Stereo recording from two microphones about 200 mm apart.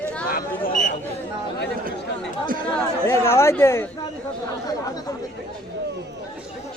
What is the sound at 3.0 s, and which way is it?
Speech, 15° left (ahead or behind).